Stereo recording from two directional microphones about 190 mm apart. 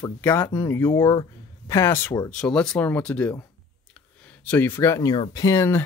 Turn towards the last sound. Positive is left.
turn(degrees=15)  # may be behind; listen again after turning